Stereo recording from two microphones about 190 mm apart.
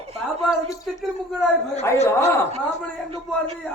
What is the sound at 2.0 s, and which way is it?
Speech, 15° left (ahead or behind).